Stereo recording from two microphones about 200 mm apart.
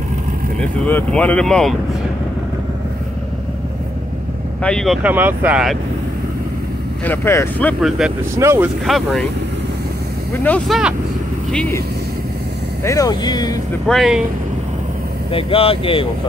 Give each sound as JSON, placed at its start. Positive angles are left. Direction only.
{"t": 0.8, "sound": "speech", "side_deg": 10}
{"t": 4.6, "sound": "speech", "side_deg": 0}
{"t": 7.1, "sound": "speech", "side_deg": 10}
{"t": 8.0, "sound": "speech", "side_deg": 0}
{"t": 8.4, "sound": "speech", "side_deg": -15}
{"t": 8.8, "sound": "speech", "side_deg": 0}
{"t": 10.4, "sound": "speech", "side_deg": 5}
{"t": 12.8, "sound": "speech", "side_deg": 15}
{"t": 13.8, "sound": "speech", "side_deg": 0}
{"t": 15.3, "sound": "speech", "side_deg": 30}